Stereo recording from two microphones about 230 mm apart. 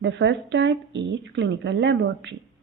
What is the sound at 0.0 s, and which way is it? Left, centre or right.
Speech, right.